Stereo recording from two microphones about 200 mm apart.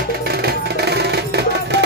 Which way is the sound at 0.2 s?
55° right (ahead or behind).